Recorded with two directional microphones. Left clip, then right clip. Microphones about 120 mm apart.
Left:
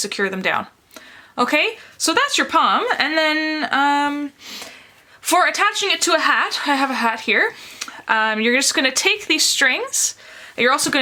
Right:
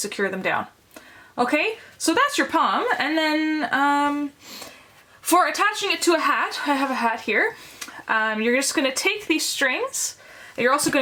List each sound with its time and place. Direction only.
0.0 s a woman's voice: 40° left (ahead or behind)
5.5 s a woman's voice: 35° left (ahead or behind)